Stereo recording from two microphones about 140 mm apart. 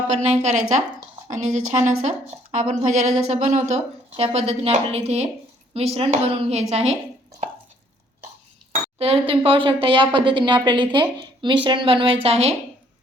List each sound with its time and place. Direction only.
0.1 s a woman's voice: 55° right (ahead or behind)
9.0 s a woman's voice: 40° right (ahead or behind)